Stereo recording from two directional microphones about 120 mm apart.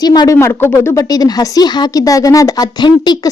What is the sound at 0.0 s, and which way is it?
Speech, 35° left (ahead or behind).